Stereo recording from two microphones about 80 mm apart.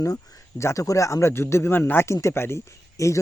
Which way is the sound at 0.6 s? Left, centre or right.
Left.